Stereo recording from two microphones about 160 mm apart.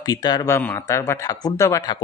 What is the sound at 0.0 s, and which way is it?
A man's voice, 25° left (ahead or behind).